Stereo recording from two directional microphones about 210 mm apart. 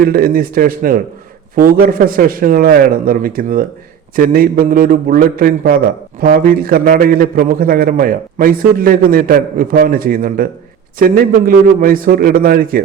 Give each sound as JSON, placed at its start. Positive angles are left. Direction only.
{"t": 0.0, "sound": "a man's voice", "side_deg": -45}